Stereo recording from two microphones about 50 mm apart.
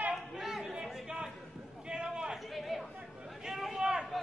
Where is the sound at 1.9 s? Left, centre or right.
Centre.